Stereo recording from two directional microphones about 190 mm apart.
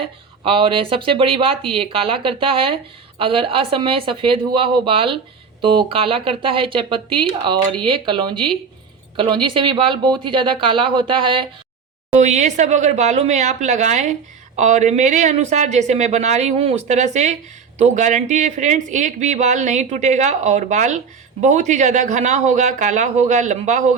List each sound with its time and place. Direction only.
0.4 s speech: 25° right (ahead or behind)